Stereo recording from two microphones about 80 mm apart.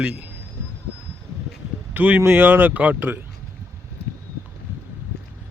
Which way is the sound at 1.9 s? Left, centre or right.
Centre.